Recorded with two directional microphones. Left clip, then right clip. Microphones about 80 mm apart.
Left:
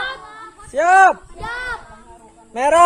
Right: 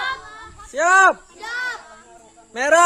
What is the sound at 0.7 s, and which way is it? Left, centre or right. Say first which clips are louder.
Speech: left 3 dB; right.